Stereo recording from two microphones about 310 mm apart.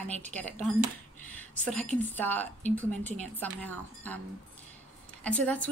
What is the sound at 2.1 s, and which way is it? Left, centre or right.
A woman's voice, centre.